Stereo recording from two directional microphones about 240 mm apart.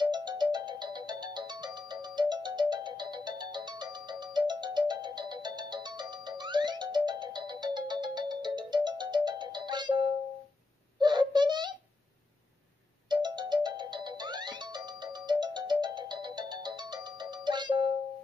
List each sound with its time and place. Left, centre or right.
0.0 s music: centre
11.0 s a sound: centre
13.1 s music: centre